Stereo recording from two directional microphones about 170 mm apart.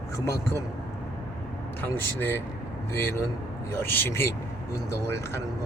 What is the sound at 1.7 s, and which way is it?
Speech, 10° left (ahead or behind).